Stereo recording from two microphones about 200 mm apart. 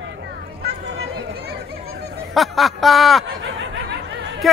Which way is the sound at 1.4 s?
55° right (ahead or behind).